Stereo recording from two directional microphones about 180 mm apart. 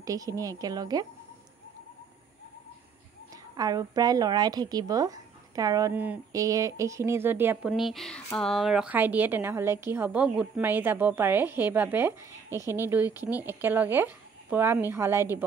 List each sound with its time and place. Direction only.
0.0 s speech: 20° right (ahead or behind)
3.5 s a woman's voice: 20° right (ahead or behind)